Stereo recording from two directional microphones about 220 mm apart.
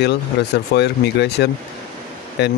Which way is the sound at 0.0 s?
50° left (ahead or behind).